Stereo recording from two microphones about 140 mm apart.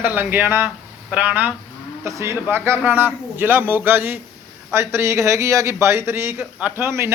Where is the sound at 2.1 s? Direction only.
20° right (ahead or behind).